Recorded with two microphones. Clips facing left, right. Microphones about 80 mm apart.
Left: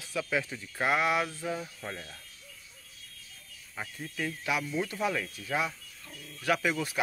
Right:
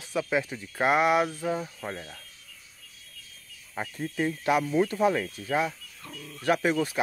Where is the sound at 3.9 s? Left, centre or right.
Right.